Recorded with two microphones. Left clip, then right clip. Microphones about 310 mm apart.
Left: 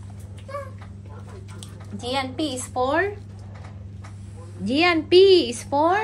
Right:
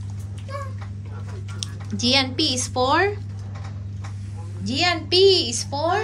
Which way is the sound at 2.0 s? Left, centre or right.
Centre.